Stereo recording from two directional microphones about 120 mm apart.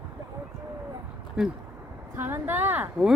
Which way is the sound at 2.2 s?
15° right (ahead or behind).